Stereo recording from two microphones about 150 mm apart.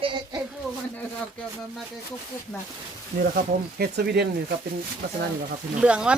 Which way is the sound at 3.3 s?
85° right.